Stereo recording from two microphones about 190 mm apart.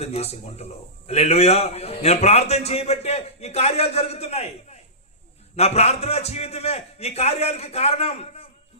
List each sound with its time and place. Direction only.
0.0 s a man's voice: 35° left (ahead or behind)